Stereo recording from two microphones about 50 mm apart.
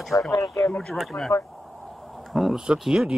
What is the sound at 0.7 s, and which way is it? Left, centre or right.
Speech, centre.